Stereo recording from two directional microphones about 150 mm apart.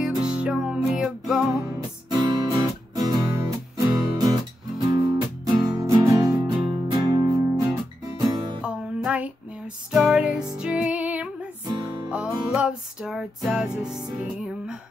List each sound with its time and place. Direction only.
0.2 s music: 5° right (ahead or behind)
1.8 s music: 30° right (ahead or behind)
8.6 s music: 10° right (ahead or behind)
11.6 s music: 25° right (ahead or behind)
12.4 s music: 5° right (ahead or behind)